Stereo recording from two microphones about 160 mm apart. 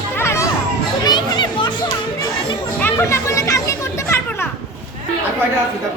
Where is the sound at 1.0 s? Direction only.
30° left (ahead or behind).